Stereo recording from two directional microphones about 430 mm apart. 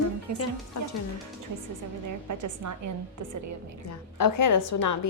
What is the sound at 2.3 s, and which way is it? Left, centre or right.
Speech, right.